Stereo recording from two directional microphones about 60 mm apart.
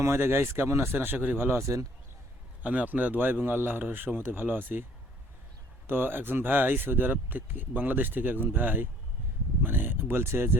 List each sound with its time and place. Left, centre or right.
0.0 s speech: right
1.6 s speech: right
2.6 s speech: right
5.9 s speech: right